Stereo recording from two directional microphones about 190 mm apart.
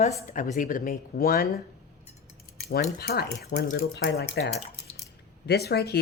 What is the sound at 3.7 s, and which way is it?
A woman's voice, 65° left (ahead or behind).